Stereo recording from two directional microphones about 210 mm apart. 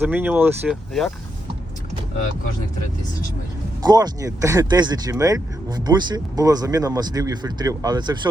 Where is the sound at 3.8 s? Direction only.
20° right (ahead or behind).